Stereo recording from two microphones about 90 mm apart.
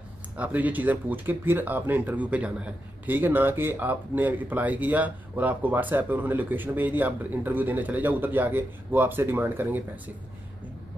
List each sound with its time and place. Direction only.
0.4 s speech: 15° right (ahead or behind)